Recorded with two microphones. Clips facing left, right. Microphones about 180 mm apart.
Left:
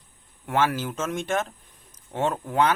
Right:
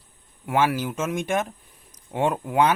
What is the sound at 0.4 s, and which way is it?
Speech, 10° right (ahead or behind).